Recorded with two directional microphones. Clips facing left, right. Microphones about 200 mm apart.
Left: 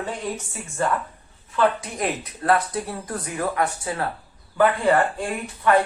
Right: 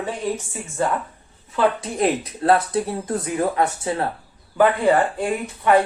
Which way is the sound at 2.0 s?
25° right (ahead or behind).